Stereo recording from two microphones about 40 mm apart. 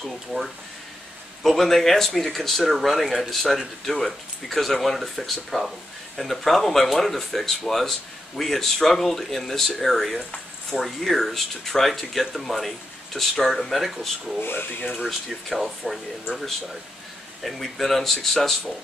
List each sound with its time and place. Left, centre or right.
0.0 s speech: centre
14.4 s speech: left
15.0 s speech: centre
17.4 s speech: centre